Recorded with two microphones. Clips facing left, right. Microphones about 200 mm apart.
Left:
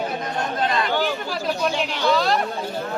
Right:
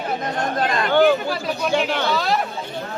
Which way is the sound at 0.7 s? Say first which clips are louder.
Right 11 dB; 50° right (ahead or behind).